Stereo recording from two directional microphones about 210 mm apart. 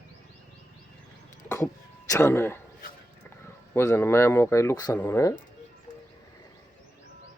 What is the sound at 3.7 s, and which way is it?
Speech, 15° left (ahead or behind).